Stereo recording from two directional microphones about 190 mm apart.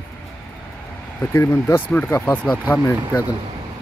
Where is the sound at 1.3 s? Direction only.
15° left (ahead or behind).